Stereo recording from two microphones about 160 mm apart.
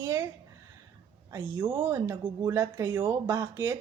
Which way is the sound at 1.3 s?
20° right (ahead or behind).